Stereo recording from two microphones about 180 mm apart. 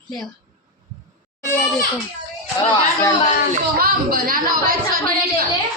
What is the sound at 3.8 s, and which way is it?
Speech, 55° right (ahead or behind).